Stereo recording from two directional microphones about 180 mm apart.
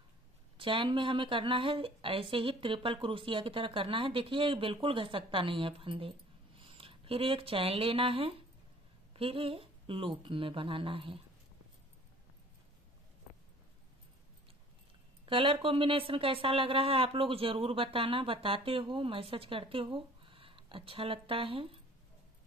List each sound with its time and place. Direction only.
0.6 s speech: 30° right (ahead or behind)
15.2 s a woman's voice: 30° right (ahead or behind)